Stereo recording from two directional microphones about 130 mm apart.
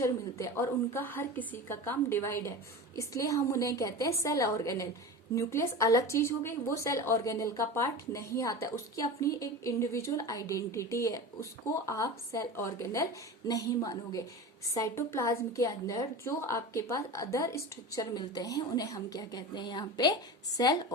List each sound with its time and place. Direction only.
0.0 s speech: 25° left (ahead or behind)